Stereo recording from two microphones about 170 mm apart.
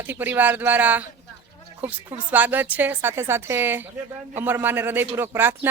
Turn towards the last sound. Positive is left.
turn(degrees=-10)  # may be behind; listen again after turning